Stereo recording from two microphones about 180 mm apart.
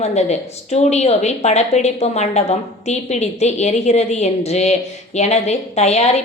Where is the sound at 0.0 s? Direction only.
35° left (ahead or behind).